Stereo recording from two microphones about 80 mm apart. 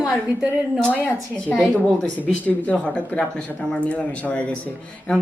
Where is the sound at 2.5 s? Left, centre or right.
Centre.